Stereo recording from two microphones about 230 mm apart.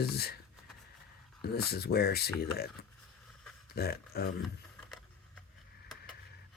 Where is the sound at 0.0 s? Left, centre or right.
Left.